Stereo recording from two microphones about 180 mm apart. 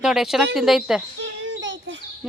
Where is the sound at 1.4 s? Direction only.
90° right.